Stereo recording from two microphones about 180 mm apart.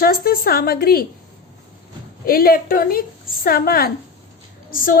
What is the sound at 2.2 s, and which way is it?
A woman's voice, 55° left (ahead or behind).